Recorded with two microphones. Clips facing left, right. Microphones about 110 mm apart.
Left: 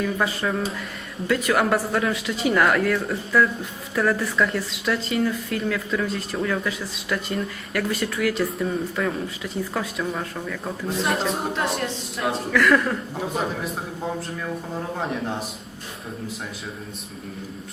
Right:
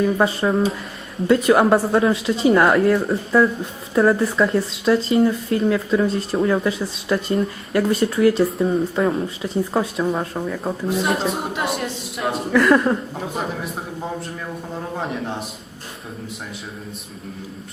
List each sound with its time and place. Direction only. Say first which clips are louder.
0.0 s speech: right 6 dB; 30° right (ahead or behind)
10.8 s speech: right 2 dB; 5° right (ahead or behind)
12.5 s speech: right 5 dB; 25° right (ahead or behind)
13.1 s speech: even; centre (ahead or behind)